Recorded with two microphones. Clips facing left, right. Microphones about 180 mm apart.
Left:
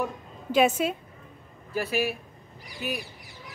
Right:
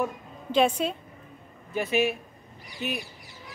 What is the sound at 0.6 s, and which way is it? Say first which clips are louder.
Speech: left 1 dB; 5° left (ahead or behind).